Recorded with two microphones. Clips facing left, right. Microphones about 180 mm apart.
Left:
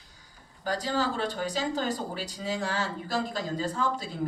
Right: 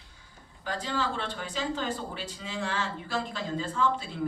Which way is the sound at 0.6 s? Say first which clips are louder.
Left 3 dB; 40° left (ahead or behind).